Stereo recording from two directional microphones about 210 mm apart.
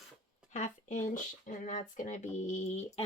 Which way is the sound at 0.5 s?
35° left (ahead or behind).